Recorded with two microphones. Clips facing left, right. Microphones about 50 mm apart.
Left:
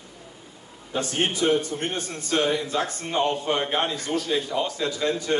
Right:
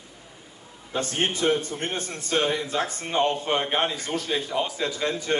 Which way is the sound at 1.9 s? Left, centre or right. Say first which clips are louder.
Right 1 dB; centre.